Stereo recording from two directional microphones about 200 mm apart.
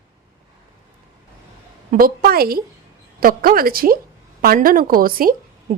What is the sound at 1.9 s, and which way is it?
A woman's voice, 45° right (ahead or behind).